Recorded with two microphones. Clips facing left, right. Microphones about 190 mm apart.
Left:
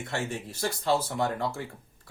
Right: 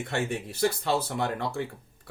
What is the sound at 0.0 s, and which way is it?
A man's voice, 60° right (ahead or behind).